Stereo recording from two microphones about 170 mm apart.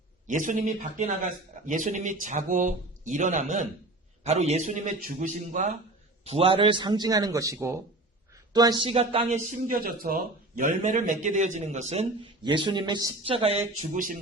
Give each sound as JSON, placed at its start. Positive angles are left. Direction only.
{"t": 0.3, "sound": "a man's voice", "side_deg": -50}
{"t": 6.2, "sound": "a man's voice", "side_deg": -35}
{"t": 8.9, "sound": "speech", "side_deg": -35}
{"t": 9.5, "sound": "a man's voice", "side_deg": -55}
{"t": 12.4, "sound": "a man's voice", "side_deg": -25}
{"t": 13.3, "sound": "speech", "side_deg": -35}
{"t": 13.9, "sound": "a man's voice", "side_deg": -50}